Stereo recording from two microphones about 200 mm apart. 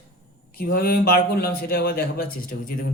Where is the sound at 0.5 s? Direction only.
50° left (ahead or behind).